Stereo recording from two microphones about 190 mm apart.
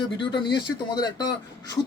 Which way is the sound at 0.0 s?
25° left (ahead or behind).